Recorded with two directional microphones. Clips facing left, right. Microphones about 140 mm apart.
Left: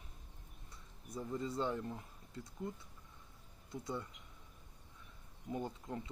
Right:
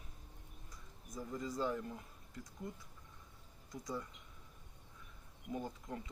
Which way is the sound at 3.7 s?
25° left (ahead or behind).